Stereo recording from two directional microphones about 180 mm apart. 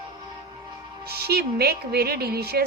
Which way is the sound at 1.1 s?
60° right (ahead or behind).